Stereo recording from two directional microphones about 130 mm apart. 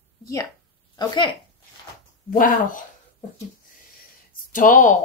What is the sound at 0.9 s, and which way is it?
Speech, 35° left (ahead or behind).